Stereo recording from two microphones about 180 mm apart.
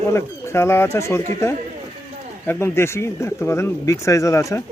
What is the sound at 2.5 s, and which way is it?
Speech, 15° left (ahead or behind).